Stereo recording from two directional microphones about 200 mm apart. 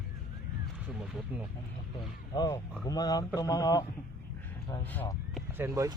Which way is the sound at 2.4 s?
20° left (ahead or behind).